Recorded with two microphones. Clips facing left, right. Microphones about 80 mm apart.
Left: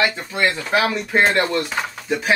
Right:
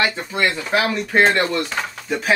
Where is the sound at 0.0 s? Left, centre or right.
Centre.